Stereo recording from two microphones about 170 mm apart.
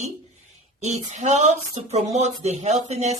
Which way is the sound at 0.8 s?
45° right (ahead or behind).